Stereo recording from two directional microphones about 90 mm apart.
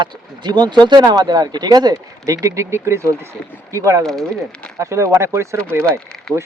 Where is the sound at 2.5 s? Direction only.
30° right (ahead or behind).